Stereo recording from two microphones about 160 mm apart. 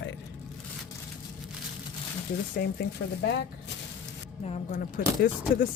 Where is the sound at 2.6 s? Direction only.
70° left (ahead or behind).